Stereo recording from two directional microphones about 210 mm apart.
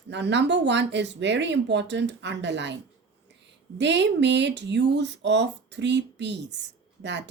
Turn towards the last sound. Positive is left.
turn(degrees=-55)  # may be behind; listen again after turning